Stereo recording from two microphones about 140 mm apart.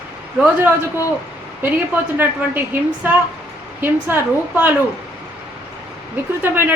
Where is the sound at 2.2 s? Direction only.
15° right (ahead or behind).